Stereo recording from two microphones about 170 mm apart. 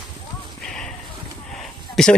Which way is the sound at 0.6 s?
5° left (ahead or behind).